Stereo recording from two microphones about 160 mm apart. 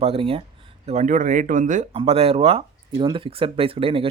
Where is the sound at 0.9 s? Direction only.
50° right (ahead or behind).